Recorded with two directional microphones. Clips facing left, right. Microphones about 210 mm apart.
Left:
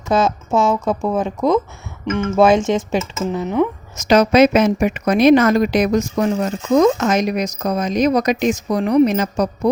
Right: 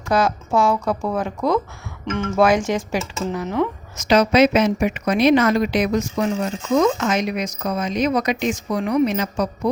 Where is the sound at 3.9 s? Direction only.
45° left (ahead or behind).